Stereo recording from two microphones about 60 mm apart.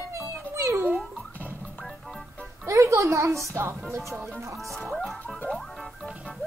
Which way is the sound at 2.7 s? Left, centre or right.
Right.